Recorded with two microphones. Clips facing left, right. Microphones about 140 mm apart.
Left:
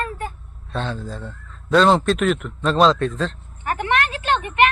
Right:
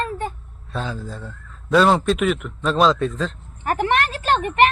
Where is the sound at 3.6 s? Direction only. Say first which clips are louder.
Right 2 dB; 35° right (ahead or behind).